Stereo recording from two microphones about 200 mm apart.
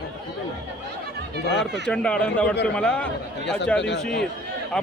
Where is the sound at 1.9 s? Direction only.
5° left (ahead or behind).